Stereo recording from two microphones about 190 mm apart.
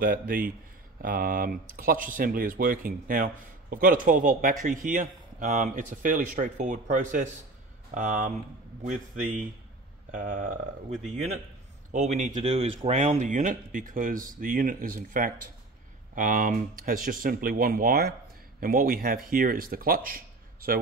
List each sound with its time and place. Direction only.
0.0 s a man's voice: 50° right (ahead or behind)
11.9 s a man's voice: 40° right (ahead or behind)